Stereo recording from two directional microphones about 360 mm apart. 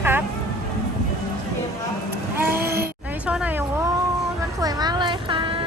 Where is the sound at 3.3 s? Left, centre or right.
Centre.